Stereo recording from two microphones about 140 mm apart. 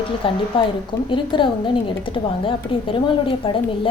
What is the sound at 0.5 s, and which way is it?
A woman's voice, 40° left (ahead or behind).